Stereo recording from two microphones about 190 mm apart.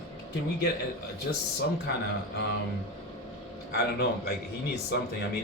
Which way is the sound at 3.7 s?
55° left (ahead or behind).